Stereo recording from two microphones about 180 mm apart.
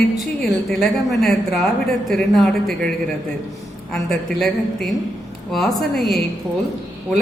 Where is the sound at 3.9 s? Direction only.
Centre (ahead or behind).